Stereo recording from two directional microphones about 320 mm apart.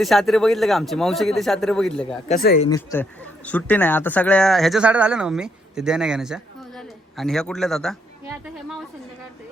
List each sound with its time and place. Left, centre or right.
0.0 s a man's voice: centre
2.2 s speech: left
2.6 s a man's voice: centre